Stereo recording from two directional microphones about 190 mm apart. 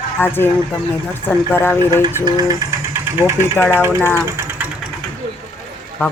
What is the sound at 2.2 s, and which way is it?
Speech, 20° right (ahead or behind).